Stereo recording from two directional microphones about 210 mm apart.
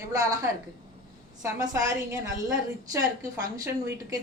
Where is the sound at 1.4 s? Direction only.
15° right (ahead or behind).